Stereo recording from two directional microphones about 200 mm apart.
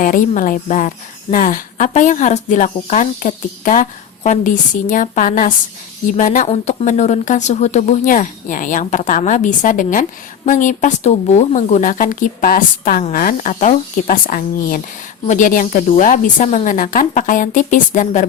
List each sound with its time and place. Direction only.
0.0 s speech: 40° left (ahead or behind)